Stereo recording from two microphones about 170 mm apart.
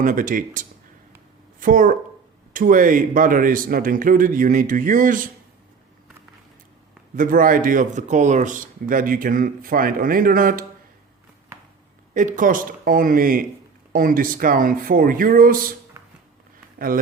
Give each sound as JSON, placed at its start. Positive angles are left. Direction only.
{"t": 0.0, "sound": "speech", "side_deg": -50}
{"t": 7.2, "sound": "speech", "side_deg": -55}
{"t": 12.1, "sound": "speech", "side_deg": -50}